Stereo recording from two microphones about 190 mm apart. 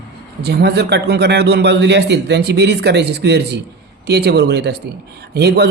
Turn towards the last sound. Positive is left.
turn(degrees=-60)  # may be behind; listen again after turning